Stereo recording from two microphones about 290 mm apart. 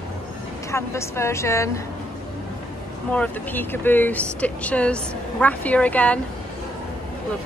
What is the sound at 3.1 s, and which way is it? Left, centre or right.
Speech, centre.